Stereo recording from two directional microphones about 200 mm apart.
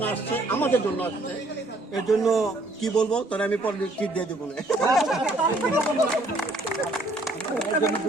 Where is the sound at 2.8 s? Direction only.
5° left (ahead or behind).